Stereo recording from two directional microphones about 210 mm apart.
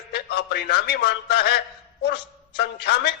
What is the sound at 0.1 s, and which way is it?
A man's voice, 50° left (ahead or behind).